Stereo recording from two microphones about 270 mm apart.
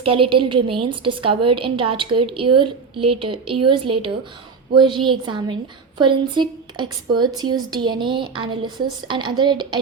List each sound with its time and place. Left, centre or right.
0.0 s a woman's voice: centre